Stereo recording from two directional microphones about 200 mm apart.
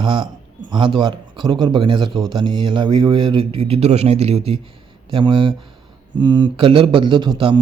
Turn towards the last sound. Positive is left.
turn(degrees=-25)  # may be behind; listen again after turning